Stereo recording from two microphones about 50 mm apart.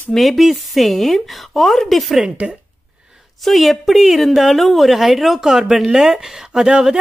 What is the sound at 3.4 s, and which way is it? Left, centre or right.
A woman's voice, centre.